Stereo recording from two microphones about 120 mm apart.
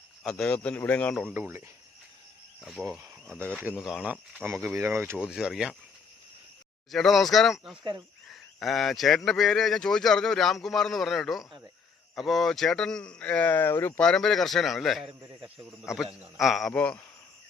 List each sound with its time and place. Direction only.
0.2 s speech: 5° left (ahead or behind)
1.3 s speech: 15° right (ahead or behind)
2.6 s speech: centre (ahead or behind)
4.6 s speech: 20° right (ahead or behind)
5.1 s speech: 5° right (ahead or behind)
6.9 s speech: centre (ahead or behind); by 14.0 s 20° left (ahead or behind)
14.0 s speech: 5° left (ahead or behind)
16.4 s speech: centre (ahead or behind)
16.7 s speech: 10° left (ahead or behind)